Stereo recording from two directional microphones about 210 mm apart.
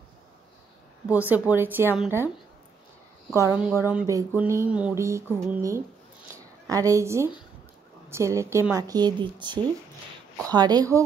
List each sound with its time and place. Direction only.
1.0 s a woman's voice: 5° right (ahead or behind)
3.3 s a woman's voice: 10° right (ahead or behind)
6.3 s a sound: 15° right (ahead or behind)
8.1 s a woman's voice: 15° right (ahead or behind)